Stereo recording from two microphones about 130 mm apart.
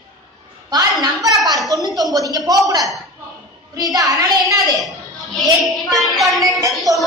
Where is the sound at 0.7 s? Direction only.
30° right (ahead or behind).